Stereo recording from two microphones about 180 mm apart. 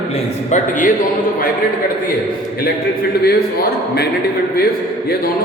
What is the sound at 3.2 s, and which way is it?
Speech, 60° left (ahead or behind).